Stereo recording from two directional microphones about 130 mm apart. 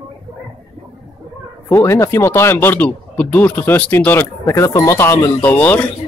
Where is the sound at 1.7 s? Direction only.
20° left (ahead or behind).